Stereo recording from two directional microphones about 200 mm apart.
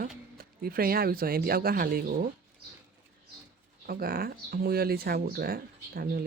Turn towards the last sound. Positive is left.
turn(degrees=-50)  # may be behind; listen again after turning